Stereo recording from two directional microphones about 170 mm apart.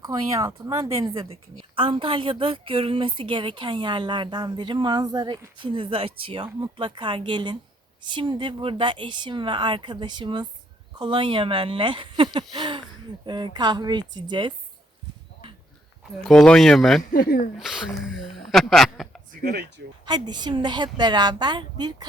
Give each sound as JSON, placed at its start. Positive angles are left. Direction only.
{"t": 0.0, "sound": "a woman's voice", "side_deg": -20}
{"t": 1.0, "sound": "a woman's voice", "side_deg": -30}
{"t": 16.2, "sound": "speech", "side_deg": 0}
{"t": 17.0, "sound": "speech", "side_deg": 55}
{"t": 17.6, "sound": "speech", "side_deg": -5}
{"t": 19.4, "sound": "speech", "side_deg": -70}
{"t": 20.1, "sound": "a woman's voice", "side_deg": -25}